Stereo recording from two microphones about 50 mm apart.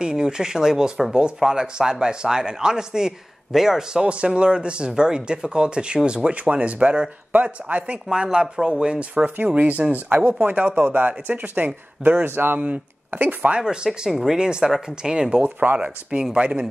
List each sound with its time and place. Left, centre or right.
0.0 s speech: centre
9.1 s speech: right
13.8 s speech: centre
15.6 s speech: right
16.2 s speech: centre